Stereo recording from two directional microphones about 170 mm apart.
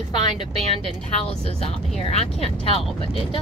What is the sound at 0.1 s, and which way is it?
Speech, 40° right (ahead or behind).